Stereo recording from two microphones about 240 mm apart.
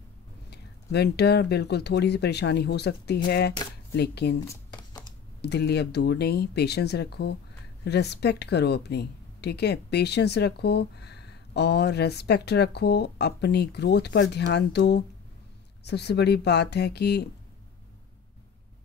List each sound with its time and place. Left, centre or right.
0.5 s speech: left
4.5 s a sound: centre
5.4 s speech: left